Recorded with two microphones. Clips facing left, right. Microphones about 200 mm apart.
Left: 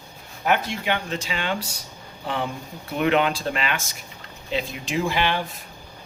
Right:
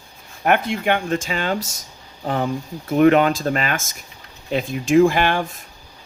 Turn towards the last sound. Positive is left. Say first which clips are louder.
# right 9 dB
turn(degrees=-50)  # may be behind; listen again after turning